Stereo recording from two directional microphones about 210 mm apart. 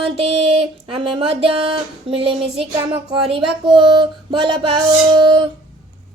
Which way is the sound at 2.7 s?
20° right (ahead or behind).